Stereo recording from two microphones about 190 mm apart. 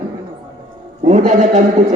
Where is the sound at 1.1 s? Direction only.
40° right (ahead or behind).